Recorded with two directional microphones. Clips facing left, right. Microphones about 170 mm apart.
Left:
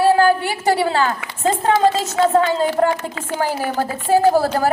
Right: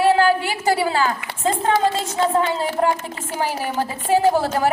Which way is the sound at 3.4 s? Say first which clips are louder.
Left 2 dB; 45° left (ahead or behind).